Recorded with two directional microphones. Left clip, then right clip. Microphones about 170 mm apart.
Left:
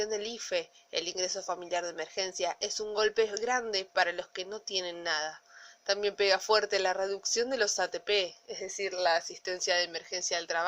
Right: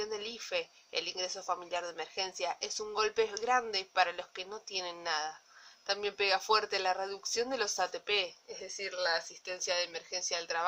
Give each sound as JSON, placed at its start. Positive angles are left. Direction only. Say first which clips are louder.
{"t": 0.0, "sound": "a woman's voice", "louder": "left 5 dB", "side_deg": 20}